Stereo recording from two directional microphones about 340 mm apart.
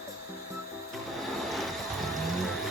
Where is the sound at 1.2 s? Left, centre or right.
Centre.